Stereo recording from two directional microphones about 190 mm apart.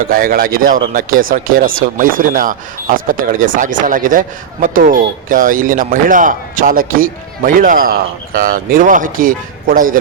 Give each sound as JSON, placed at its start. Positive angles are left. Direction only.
{"t": 0.0, "sound": "speech", "side_deg": -50}